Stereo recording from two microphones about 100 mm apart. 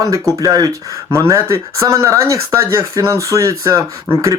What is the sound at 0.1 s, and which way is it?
Speech, 35° right (ahead or behind).